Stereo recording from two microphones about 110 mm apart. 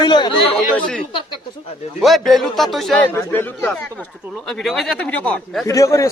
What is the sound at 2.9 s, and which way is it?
Speech, 15° left (ahead or behind).